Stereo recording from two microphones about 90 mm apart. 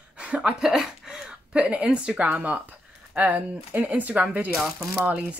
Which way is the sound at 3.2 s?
15° right (ahead or behind).